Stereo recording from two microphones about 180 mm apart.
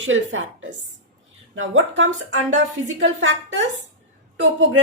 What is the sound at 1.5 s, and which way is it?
A woman's voice, 90° right.